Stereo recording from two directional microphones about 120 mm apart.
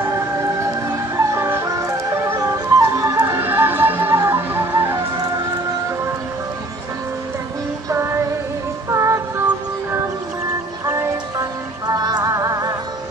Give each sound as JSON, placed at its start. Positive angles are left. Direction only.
{"t": 0.0, "sound": "music", "side_deg": -25}
{"t": 7.9, "sound": "music", "side_deg": -20}
{"t": 11.9, "sound": "music", "side_deg": -35}